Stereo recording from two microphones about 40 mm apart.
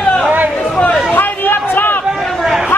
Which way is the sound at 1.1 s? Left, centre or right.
Left.